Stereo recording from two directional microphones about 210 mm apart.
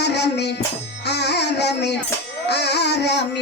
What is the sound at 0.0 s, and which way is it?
Music, 55° left (ahead or behind).